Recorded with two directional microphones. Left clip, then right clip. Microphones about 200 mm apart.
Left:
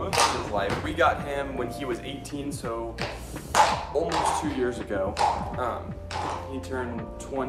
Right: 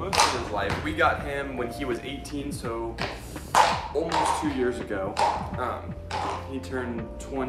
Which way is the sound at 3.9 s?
20° left (ahead or behind).